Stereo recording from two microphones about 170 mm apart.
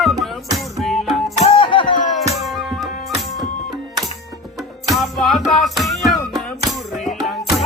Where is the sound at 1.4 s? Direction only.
35° left (ahead or behind).